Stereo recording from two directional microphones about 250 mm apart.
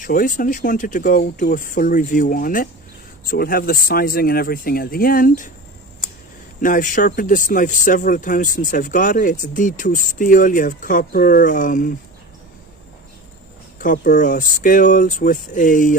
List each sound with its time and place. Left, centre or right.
0.0 s speech: left
6.6 s speech: left
13.7 s speech: left